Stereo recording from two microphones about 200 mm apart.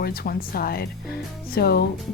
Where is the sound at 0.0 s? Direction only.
50° left (ahead or behind).